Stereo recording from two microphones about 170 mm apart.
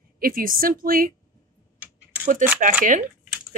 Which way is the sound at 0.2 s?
55° right (ahead or behind).